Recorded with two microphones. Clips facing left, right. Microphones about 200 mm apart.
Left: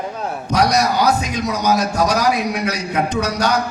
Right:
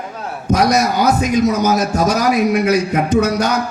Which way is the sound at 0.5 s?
50° right (ahead or behind).